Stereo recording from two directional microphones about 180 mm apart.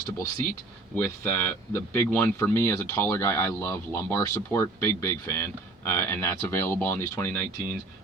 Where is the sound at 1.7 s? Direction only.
10° left (ahead or behind).